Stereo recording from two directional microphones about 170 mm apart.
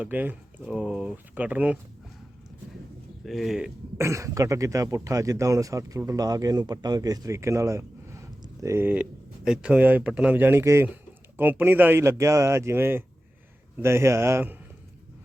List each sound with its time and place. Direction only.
0.0 s speech: 10° right (ahead or behind)
3.2 s speech: centre (ahead or behind)
3.9 s speech: 15° right (ahead or behind)